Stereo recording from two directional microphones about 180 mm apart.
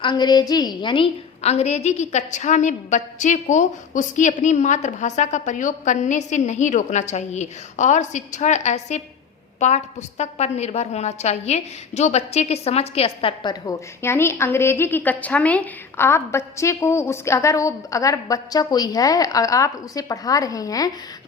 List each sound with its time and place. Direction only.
0.0 s a woman's voice: 25° left (ahead or behind)